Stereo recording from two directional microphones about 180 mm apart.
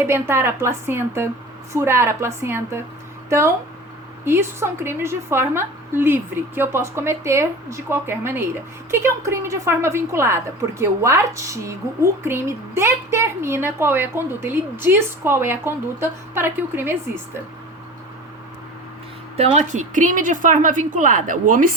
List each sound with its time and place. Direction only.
0.0 s a woman's voice: 15° right (ahead or behind)
19.4 s a woman's voice: 40° right (ahead or behind)